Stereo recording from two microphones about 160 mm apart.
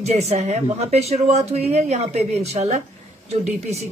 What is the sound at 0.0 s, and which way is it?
Speech, 45° right (ahead or behind).